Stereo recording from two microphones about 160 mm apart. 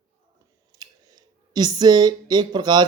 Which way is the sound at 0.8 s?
25° right (ahead or behind).